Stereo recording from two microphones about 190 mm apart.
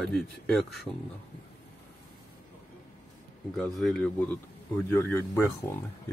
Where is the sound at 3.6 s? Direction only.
Centre (ahead or behind).